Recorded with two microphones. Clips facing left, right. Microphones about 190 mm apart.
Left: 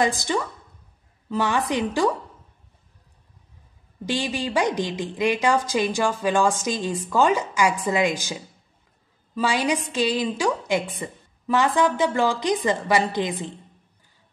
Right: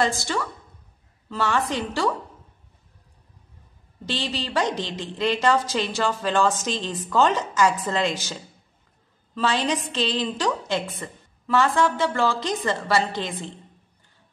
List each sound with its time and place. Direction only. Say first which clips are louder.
0.0 s a woman's voice: left 2 dB; 15° left (ahead or behind)
4.0 s a woman's voice: left 3 dB; 15° left (ahead or behind)